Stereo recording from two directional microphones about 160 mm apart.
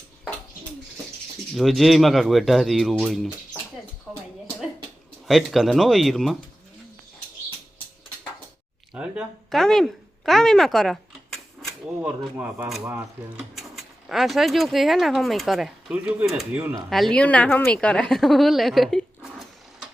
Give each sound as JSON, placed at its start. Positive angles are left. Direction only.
{"t": 1.5, "sound": "a woman's voice", "side_deg": 0}
{"t": 4.1, "sound": "a sound", "side_deg": 0}
{"t": 5.3, "sound": "a woman's voice", "side_deg": 0}
{"t": 8.9, "sound": "a sound", "side_deg": -5}
{"t": 12.4, "sound": "a woman's voice", "side_deg": -5}
{"t": 13.6, "sound": "speech", "side_deg": 0}
{"t": 16.9, "sound": "a woman's voice", "side_deg": 5}